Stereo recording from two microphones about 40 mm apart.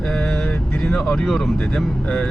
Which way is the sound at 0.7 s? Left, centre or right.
Centre.